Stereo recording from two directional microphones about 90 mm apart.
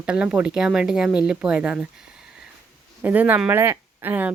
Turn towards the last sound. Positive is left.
turn(degrees=-20)  # may be behind; listen again after turning